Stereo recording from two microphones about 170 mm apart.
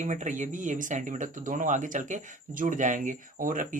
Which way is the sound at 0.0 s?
45° right (ahead or behind).